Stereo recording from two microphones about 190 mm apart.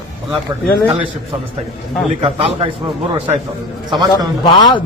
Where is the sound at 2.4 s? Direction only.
30° right (ahead or behind).